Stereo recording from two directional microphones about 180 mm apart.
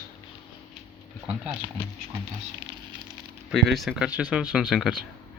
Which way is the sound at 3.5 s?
Centre (ahead or behind).